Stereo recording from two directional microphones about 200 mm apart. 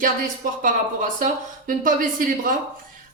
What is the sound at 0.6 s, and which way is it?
Speech, 40° right (ahead or behind).